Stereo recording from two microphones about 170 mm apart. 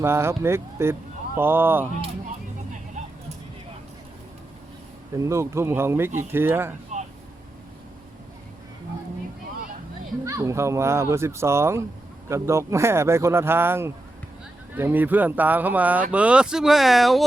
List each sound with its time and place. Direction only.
0.0 s speech: 15° right (ahead or behind)
5.1 s speech: 15° right (ahead or behind)
10.2 s speech: 20° right (ahead or behind); by 17.2 s centre (ahead or behind)